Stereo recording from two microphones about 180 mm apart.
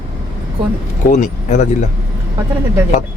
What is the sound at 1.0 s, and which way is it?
Speech, 45° left (ahead or behind).